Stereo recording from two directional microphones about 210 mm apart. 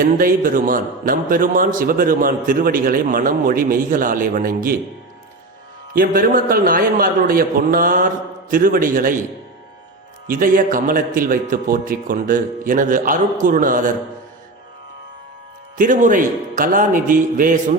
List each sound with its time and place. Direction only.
0.0 s a man's voice: 40° right (ahead or behind)
5.9 s a man's voice: 45° right (ahead or behind)
10.2 s a man's voice: 40° right (ahead or behind)
15.8 s a man's voice: 40° right (ahead or behind)